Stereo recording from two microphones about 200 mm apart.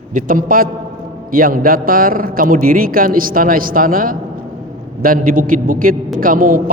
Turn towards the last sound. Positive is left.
turn(degrees=-45)  # may be behind; listen again after turning